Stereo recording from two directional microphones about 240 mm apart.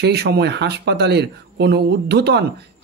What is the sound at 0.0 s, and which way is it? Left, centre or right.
Speech, right.